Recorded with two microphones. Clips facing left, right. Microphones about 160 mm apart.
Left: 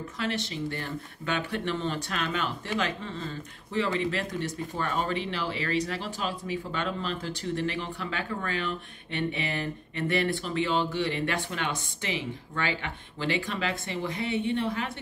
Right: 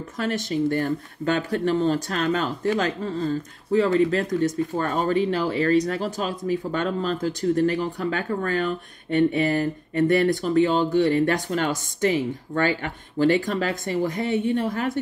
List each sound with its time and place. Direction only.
0.2 s speech: 45° right (ahead or behind)